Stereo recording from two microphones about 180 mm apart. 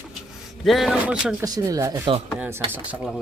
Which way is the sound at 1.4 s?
20° right (ahead or behind).